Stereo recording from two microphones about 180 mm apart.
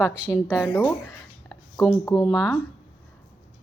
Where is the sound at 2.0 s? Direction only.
20° left (ahead or behind).